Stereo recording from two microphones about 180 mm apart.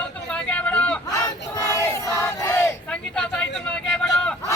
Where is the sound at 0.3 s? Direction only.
5° left (ahead or behind).